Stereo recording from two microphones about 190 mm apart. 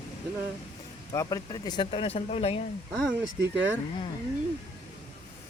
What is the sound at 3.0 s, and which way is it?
Speech, 5° right (ahead or behind).